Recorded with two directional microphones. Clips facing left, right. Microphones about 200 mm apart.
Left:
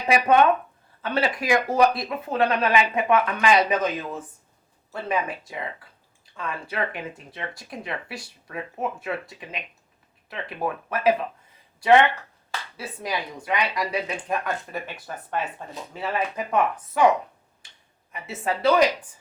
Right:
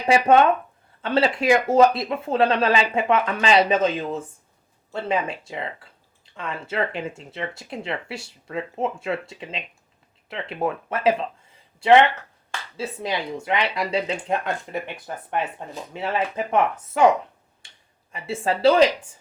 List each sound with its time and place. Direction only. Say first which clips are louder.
0.0 s speech: right 2 dB; 25° right (ahead or behind)